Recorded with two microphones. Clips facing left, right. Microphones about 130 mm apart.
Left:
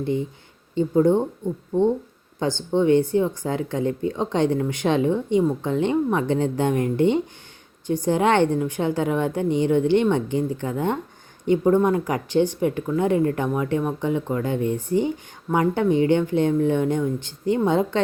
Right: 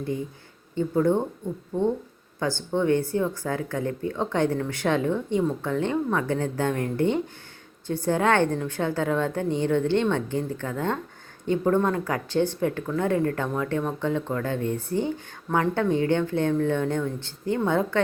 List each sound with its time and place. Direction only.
0.8 s speech: 20° left (ahead or behind)
2.4 s speech: 20° left (ahead or behind)